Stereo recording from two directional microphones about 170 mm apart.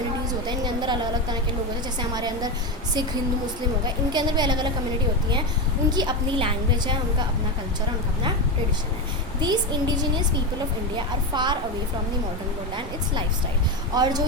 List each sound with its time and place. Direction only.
0.3 s a sound: 25° right (ahead or behind)
2.0 s a woman's voice: 25° right (ahead or behind)
3.8 s a woman's voice: 25° right (ahead or behind)
5.9 s a woman's voice: 25° right (ahead or behind)
9.4 s a woman's voice: 25° right (ahead or behind)
13.9 s a woman's voice: 25° right (ahead or behind)